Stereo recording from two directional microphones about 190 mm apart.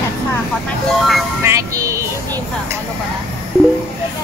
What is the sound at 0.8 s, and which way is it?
Speech, centre (ahead or behind).